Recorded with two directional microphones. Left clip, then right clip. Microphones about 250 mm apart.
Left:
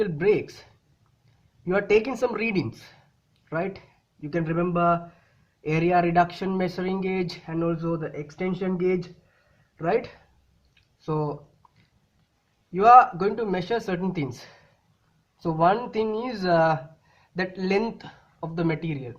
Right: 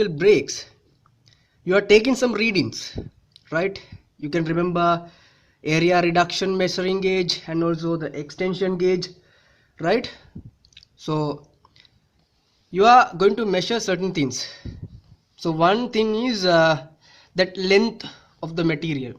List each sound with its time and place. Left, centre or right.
0.0 s speech: right
1.6 s speech: right
10.8 s a sound: right
12.7 s speech: right